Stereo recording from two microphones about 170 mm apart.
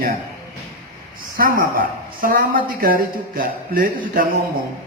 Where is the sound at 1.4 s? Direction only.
55° right (ahead or behind).